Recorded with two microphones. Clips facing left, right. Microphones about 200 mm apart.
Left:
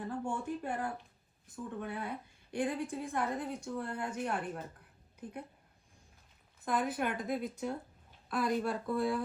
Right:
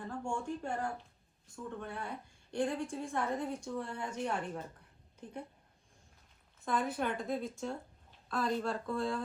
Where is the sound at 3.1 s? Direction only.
5° left (ahead or behind).